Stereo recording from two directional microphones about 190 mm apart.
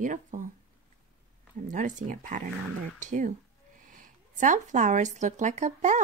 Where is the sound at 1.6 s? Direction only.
40° right (ahead or behind).